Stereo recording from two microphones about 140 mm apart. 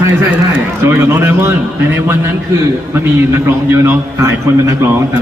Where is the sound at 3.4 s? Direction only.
15° right (ahead or behind).